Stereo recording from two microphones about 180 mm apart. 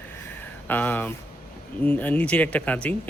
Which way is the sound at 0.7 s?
10° left (ahead or behind).